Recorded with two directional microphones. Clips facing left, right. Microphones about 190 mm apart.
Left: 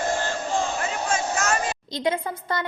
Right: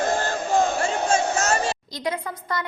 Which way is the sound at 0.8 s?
25° right (ahead or behind).